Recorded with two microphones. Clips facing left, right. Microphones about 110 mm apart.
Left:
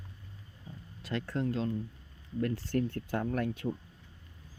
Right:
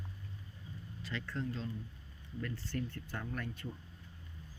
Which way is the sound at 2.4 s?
60° left (ahead or behind).